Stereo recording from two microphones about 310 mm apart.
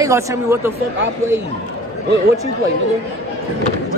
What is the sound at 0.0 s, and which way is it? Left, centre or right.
Speech, centre.